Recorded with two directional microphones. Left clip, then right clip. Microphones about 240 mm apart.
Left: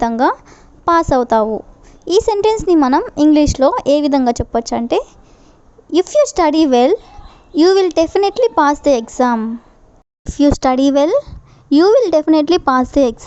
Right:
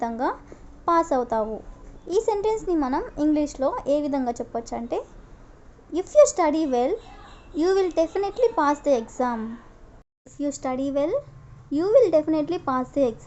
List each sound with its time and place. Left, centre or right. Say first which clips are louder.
0.0 s speech: left 12 dB; left